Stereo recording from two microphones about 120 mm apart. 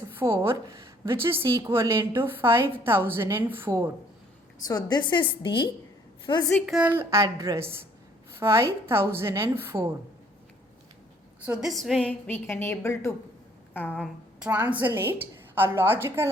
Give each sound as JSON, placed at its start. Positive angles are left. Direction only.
{"t": 0.1, "sound": "a woman's voice", "side_deg": -20}
{"t": 4.6, "sound": "a woman's voice", "side_deg": 35}
{"t": 6.7, "sound": "a woman's voice", "side_deg": -15}
{"t": 11.4, "sound": "a woman's voice", "side_deg": -5}
{"t": 12.5, "sound": "a woman's voice", "side_deg": 20}
{"t": 14.3, "sound": "a woman's voice", "side_deg": -10}